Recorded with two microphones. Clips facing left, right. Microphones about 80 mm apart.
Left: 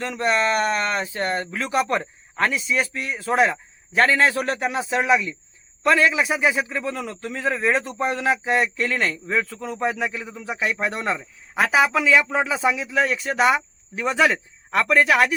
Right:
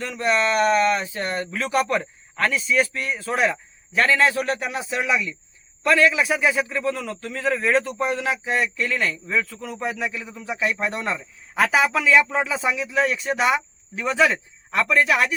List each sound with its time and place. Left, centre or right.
0.0 s a man's voice: left
3.9 s a man's voice: left; by 7.9 s centre
8.0 s speech: left
8.4 s speech: left
11.9 s a man's voice: left